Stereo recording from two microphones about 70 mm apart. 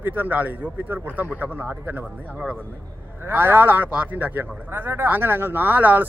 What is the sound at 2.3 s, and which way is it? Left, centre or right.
Speech, centre.